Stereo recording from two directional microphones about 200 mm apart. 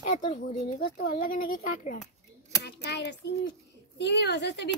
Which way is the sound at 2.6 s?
55° left (ahead or behind).